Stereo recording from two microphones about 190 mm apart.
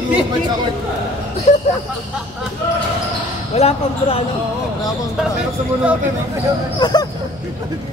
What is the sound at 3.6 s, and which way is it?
Speech, 30° left (ahead or behind).